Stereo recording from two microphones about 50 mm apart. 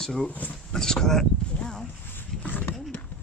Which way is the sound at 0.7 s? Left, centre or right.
Centre.